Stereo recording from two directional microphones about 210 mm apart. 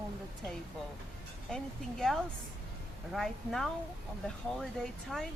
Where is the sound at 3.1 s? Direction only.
Centre (ahead or behind).